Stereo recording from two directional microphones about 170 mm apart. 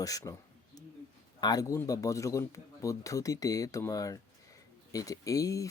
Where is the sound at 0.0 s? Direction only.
20° left (ahead or behind).